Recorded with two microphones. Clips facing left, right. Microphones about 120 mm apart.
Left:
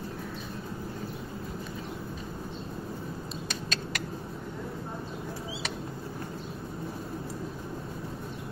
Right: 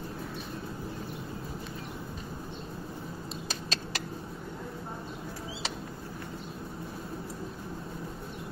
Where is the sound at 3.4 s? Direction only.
30° right (ahead or behind).